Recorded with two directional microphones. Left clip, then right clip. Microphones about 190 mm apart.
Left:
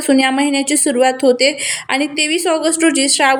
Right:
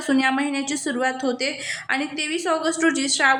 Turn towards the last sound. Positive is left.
turn(degrees=20)  # may be behind; listen again after turning